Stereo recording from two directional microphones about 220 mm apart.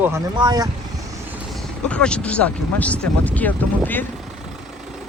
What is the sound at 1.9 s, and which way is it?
Speech, 5° left (ahead or behind).